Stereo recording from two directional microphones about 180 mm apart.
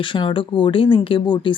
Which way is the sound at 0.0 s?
25° left (ahead or behind).